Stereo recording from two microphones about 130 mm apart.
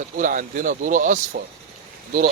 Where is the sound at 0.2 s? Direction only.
85° right.